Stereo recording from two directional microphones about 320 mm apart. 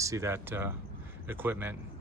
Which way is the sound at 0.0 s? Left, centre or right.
Centre.